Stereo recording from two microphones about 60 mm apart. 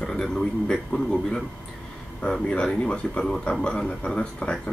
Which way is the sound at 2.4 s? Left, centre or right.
Centre.